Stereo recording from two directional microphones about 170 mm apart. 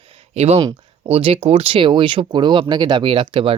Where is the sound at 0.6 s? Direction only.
25° right (ahead or behind).